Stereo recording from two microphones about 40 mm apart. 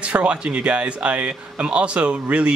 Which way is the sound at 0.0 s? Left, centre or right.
Right.